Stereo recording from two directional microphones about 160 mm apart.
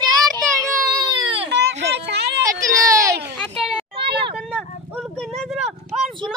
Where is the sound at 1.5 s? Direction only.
90° right.